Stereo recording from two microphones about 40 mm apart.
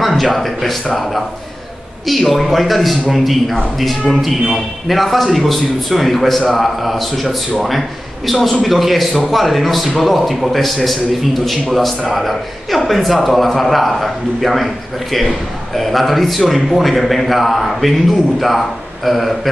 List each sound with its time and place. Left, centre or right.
0.0 s speech: centre
2.0 s a man's voice: centre